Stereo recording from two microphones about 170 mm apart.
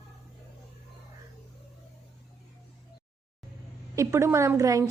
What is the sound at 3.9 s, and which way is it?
Speech, 15° right (ahead or behind).